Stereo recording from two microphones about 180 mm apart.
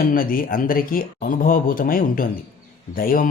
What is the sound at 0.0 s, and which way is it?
Speech, 50° left (ahead or behind).